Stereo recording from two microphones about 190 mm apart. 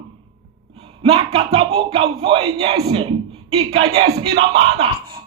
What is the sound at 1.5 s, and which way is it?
Speech, 30° right (ahead or behind).